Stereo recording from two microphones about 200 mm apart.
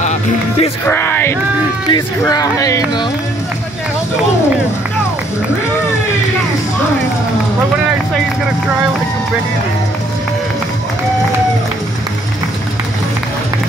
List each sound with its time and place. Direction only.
0.0 s speech: 35° left (ahead or behind)
0.8 s speech: 10° left (ahead or behind)